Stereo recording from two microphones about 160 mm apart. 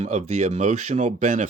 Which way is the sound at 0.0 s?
45° right (ahead or behind).